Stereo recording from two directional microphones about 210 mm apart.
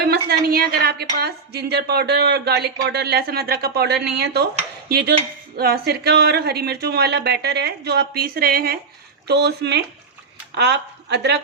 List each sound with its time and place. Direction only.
0.0 s a woman's voice: 50° right (ahead or behind)